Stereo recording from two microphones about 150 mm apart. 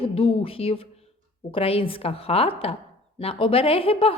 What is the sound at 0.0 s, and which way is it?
A woman's voice, 40° left (ahead or behind).